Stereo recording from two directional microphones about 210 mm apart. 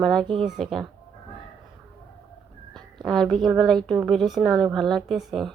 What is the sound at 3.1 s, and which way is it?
A woman's voice, centre (ahead or behind).